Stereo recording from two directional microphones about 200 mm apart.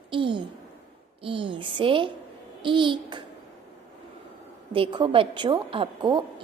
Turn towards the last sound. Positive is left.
turn(degrees=-25)  # may be behind; listen again after turning